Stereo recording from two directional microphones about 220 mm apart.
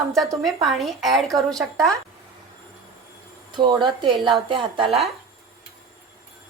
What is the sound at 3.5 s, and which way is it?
Speech, 20° right (ahead or behind).